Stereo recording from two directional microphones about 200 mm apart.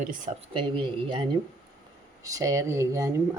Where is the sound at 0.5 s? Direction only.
25° right (ahead or behind).